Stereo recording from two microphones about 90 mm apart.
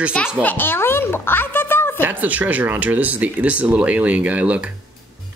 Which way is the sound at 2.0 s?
20° right (ahead or behind).